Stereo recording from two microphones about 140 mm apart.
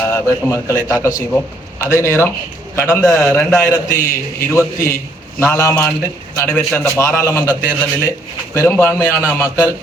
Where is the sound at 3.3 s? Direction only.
5° left (ahead or behind).